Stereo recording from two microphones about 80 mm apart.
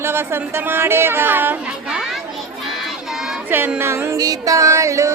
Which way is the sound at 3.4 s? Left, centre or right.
Right.